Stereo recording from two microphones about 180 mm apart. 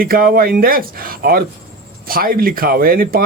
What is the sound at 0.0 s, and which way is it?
Speech, 55° right (ahead or behind).